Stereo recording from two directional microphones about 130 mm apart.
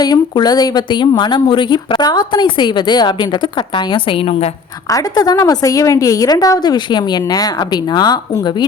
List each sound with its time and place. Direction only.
0.0 s a woman's voice: 30° left (ahead or behind)
4.9 s a woman's voice: 30° left (ahead or behind)